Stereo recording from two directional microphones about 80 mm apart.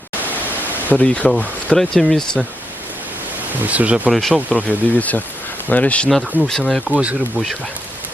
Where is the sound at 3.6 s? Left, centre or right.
Centre.